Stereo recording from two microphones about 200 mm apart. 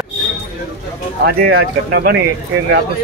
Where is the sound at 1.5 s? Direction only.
55° right (ahead or behind).